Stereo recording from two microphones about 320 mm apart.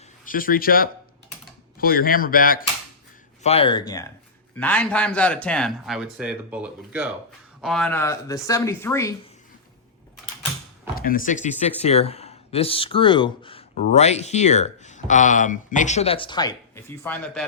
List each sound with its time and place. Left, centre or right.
0.3 s speech: left; by 9.1 s centre
10.9 s speech: left; by 17.4 s centre